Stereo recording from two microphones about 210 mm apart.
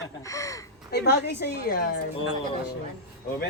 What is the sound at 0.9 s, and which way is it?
Speech, 50° left (ahead or behind).